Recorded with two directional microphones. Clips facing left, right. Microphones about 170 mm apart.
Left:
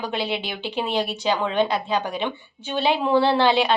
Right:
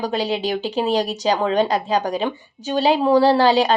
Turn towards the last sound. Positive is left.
turn(degrees=-40)  # may be behind; listen again after turning